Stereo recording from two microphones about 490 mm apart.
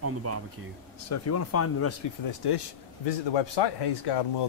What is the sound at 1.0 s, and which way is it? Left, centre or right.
Speech, left.